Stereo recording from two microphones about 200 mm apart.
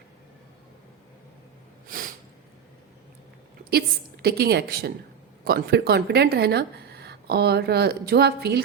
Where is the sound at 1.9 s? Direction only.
45° right (ahead or behind).